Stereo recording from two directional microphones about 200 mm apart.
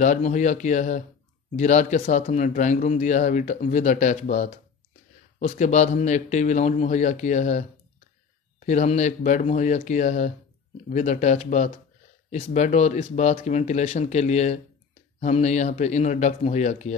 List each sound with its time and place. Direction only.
0.0 s speech: 40° left (ahead or behind)